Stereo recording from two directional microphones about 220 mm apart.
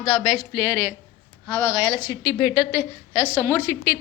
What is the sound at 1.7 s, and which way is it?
A woman's voice, 20° left (ahead or behind).